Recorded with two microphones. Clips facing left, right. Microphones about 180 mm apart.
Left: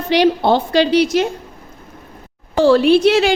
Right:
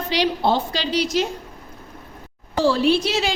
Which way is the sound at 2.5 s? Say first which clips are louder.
Left 7 dB; 60° left (ahead or behind).